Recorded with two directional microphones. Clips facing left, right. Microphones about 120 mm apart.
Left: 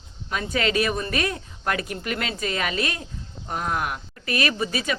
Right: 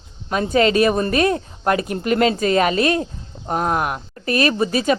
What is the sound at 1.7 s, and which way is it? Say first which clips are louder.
Speech: right 10 dB; 30° right (ahead or behind).